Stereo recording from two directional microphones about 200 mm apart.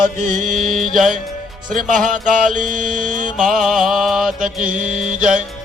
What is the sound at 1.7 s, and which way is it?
Mantra, 40° right (ahead or behind).